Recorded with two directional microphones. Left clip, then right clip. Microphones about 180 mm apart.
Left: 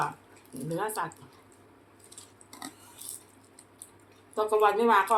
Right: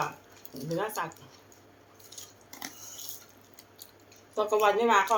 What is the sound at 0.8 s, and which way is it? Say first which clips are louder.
Speech: left 1 dB; 25° left (ahead or behind).